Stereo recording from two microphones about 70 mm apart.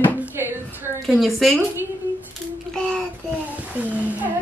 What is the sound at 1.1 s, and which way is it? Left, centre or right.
Speech, centre.